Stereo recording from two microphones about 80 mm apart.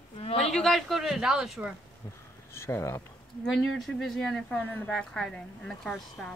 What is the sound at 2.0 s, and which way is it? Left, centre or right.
Speech, left.